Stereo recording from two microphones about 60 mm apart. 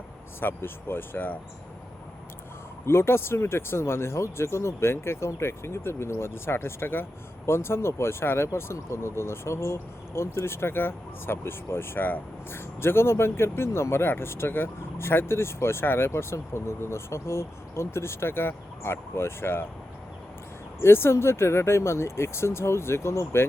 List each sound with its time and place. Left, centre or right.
0.3 s speech: left
2.8 s speech: left
20.8 s speech: left